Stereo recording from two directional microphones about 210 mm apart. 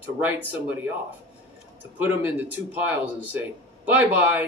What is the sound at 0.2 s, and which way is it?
Speech, 5° right (ahead or behind).